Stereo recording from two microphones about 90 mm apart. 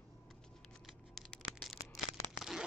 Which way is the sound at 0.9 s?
5° left (ahead or behind).